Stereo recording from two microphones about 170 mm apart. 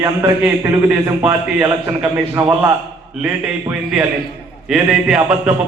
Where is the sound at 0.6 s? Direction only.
15° right (ahead or behind).